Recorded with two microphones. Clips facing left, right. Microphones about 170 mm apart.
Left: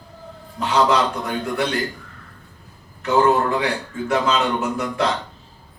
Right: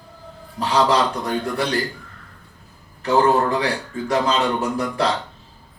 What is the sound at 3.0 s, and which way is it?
A man's voice, 35° right (ahead or behind).